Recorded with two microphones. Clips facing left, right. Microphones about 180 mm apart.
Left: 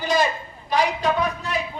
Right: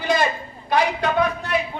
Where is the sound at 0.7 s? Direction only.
60° right (ahead or behind).